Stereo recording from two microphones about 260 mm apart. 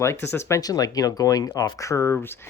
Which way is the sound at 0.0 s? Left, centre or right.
Centre.